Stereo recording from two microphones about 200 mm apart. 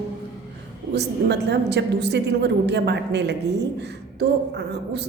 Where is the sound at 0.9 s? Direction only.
55° right (ahead or behind).